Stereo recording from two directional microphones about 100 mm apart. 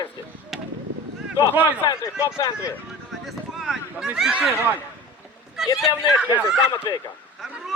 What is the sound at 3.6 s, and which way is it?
Speech, 5° right (ahead or behind).